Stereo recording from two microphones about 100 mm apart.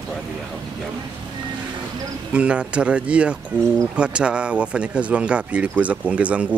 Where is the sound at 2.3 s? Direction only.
10° right (ahead or behind).